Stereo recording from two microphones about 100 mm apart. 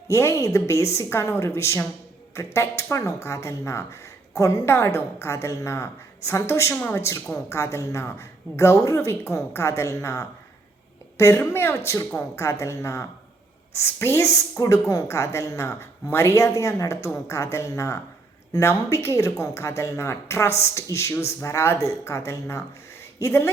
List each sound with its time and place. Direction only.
0.1 s a woman's voice: 30° left (ahead or behind)